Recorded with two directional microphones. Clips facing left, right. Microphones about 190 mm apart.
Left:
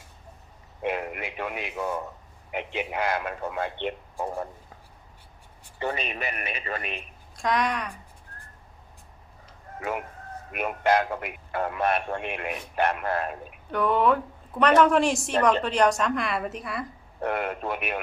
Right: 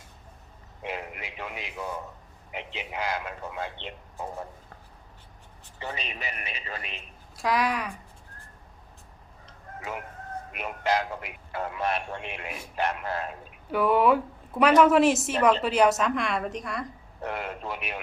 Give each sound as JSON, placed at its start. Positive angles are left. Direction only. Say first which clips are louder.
{"t": 0.8, "sound": "a sound", "louder": "left 6 dB", "side_deg": 55}
{"t": 2.5, "sound": "a man's voice", "louder": "left 6 dB", "side_deg": 55}
{"t": 5.8, "sound": "a man's voice", "louder": "left 6 dB", "side_deg": 55}
{"t": 7.3, "sound": "a woman's voice", "louder": "even", "side_deg": -5}
{"t": 10.5, "sound": "a man's voice", "louder": "left 4 dB", "side_deg": 55}
{"t": 13.7, "sound": "a woman's voice", "louder": "right 1 dB", "side_deg": -5}
{"t": 17.2, "sound": "a man's voice", "louder": "left 5 dB", "side_deg": 55}